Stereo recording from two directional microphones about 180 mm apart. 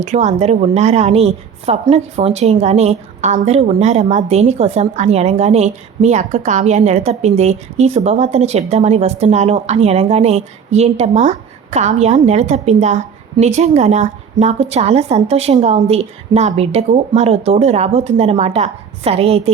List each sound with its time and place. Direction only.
0.0 s a woman's voice: 40° right (ahead or behind)